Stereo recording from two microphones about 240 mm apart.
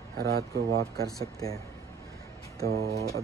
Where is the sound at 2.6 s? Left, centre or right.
Right.